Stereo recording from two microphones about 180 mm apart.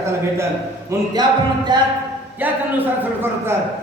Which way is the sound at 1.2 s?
25° right (ahead or behind).